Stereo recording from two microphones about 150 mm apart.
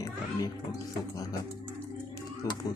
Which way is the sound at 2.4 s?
20° left (ahead or behind).